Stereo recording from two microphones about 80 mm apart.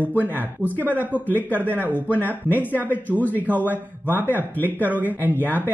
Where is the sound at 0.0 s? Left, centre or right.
Right.